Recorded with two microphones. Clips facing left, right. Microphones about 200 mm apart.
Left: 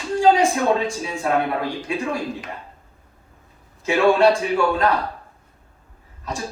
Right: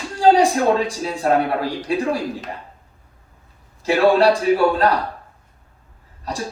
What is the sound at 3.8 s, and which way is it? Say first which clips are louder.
A man's voice: right 1 dB; 35° right (ahead or behind).